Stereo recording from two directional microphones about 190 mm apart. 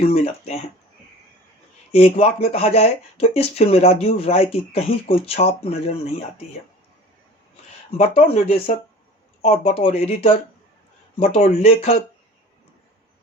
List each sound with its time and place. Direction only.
0.0 s speech: 35° left (ahead or behind)
1.9 s speech: 35° left (ahead or behind)
7.9 s speech: 30° left (ahead or behind)
11.3 s speech: 30° left (ahead or behind)